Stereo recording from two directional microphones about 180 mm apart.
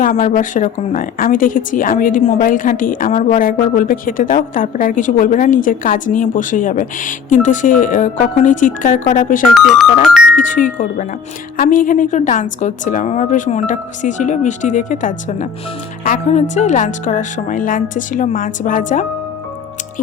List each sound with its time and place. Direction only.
0.0 s a woman's voice: 45° left (ahead or behind)
9.6 s speech: centre (ahead or behind)
10.3 s a woman's voice: 50° left (ahead or behind)